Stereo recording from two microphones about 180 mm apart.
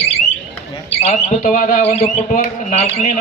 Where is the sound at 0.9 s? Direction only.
40° left (ahead or behind).